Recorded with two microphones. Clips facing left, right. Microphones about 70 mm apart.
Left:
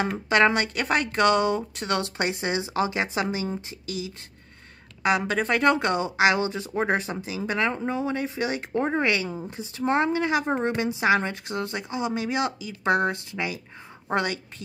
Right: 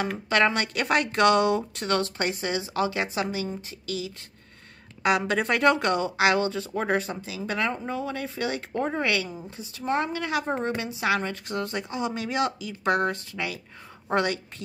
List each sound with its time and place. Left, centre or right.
0.3 s speech: centre
5.0 s speech: centre; by 7.1 s left
7.1 s speech: centre
10.2 s speech: centre
11.4 s a woman's voice: centre